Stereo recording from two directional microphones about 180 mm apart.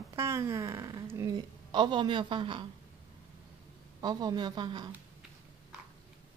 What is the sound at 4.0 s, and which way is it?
Speech, 20° right (ahead or behind).